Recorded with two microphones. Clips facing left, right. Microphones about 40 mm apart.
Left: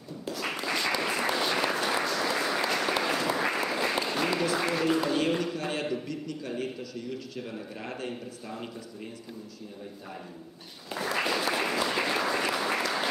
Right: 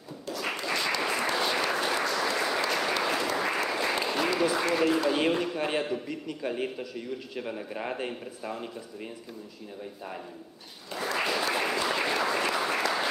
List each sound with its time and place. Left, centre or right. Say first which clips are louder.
0.3 s applause: even; centre
4.7 s speech: right 3 dB; centre
5.3 s a man's voice: right 2 dB; centre
10.9 s applause: even; centre